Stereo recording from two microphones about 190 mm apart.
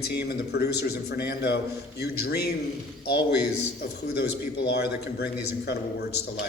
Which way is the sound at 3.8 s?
60° left (ahead or behind).